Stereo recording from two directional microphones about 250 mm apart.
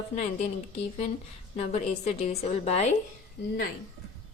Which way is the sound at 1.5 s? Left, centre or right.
Left.